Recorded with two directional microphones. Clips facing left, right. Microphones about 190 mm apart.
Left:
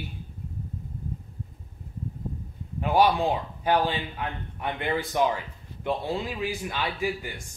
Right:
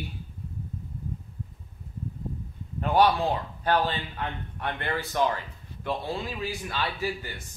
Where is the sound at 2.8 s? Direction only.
10° left (ahead or behind).